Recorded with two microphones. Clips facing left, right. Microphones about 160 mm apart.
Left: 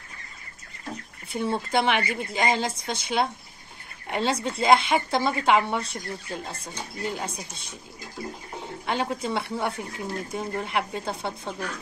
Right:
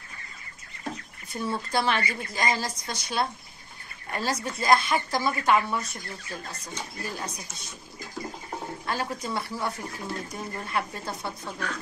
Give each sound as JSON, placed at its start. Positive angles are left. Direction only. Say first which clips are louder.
{"t": 1.3, "sound": "speech", "louder": "left 3 dB", "side_deg": 20}
{"t": 8.8, "sound": "speech", "louder": "left 5 dB", "side_deg": 20}